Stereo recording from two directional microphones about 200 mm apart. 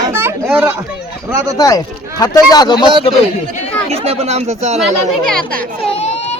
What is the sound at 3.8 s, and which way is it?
Speech, 30° right (ahead or behind).